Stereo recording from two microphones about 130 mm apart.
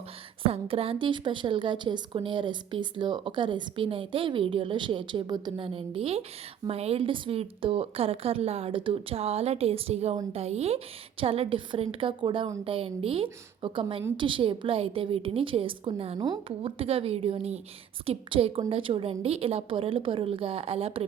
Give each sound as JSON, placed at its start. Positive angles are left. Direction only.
{"t": 0.4, "sound": "a woman's voice", "side_deg": -45}
{"t": 16.1, "sound": "a woman's voice", "side_deg": -30}